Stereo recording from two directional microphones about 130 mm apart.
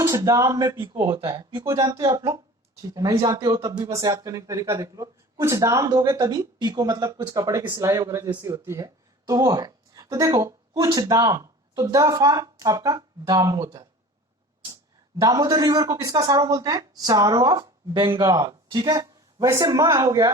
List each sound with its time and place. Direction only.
0.0 s speech: 25° right (ahead or behind)
15.2 s speech: 30° right (ahead or behind)